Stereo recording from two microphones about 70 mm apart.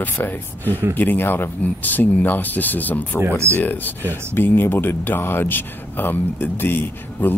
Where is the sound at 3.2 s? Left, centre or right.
Right.